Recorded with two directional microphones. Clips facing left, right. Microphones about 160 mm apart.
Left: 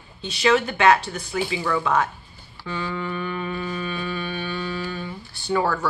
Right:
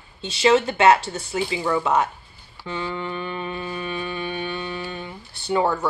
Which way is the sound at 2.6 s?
25° right (ahead or behind).